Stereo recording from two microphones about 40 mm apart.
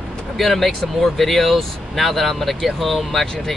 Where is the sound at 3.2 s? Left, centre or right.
Centre.